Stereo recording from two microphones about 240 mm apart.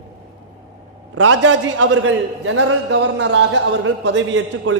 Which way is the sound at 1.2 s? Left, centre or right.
Right.